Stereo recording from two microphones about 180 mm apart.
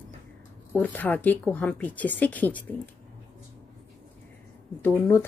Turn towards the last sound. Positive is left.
turn(degrees=10)  # may be behind; listen again after turning